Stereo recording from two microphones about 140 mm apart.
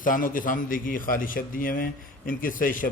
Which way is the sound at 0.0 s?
80° left.